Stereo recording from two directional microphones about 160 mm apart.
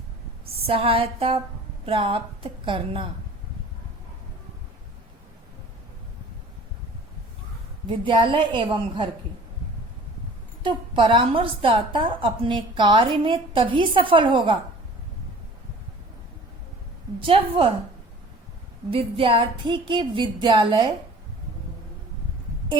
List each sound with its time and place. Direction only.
0.6 s a woman's voice: 35° right (ahead or behind)
7.9 s a woman's voice: 30° right (ahead or behind)
10.6 s a woman's voice: 30° right (ahead or behind)
17.2 s a woman's voice: 35° right (ahead or behind)
18.9 s a woman's voice: 35° right (ahead or behind)